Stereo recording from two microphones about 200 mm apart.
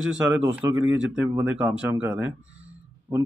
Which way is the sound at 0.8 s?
5° right (ahead or behind).